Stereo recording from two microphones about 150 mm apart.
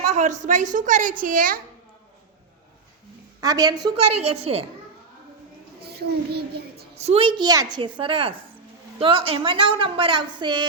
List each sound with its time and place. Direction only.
0.0 s a woman's voice: 50° right (ahead or behind); by 1.6 s 65° right (ahead or behind)
3.4 s a woman's voice: 25° right (ahead or behind)
3.9 s a woman's voice: 40° right (ahead or behind)
5.8 s a child's voice: 90° right
6.9 s a woman's voice: 45° right (ahead or behind)